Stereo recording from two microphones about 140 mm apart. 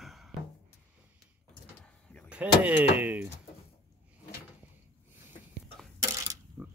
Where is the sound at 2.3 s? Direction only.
10° right (ahead or behind).